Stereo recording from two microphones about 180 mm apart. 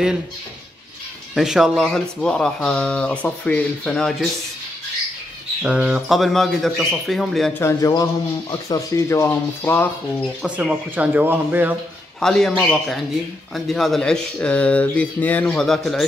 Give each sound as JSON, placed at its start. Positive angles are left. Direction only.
{"t": 1.3, "sound": "speech", "side_deg": 0}
{"t": 5.6, "sound": "speech", "side_deg": -5}
{"t": 7.5, "sound": "speech", "side_deg": 15}
{"t": 10.4, "sound": "speech", "side_deg": -5}
{"t": 12.2, "sound": "speech", "side_deg": 5}